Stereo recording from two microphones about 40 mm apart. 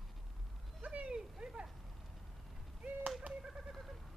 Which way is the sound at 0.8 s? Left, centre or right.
Right.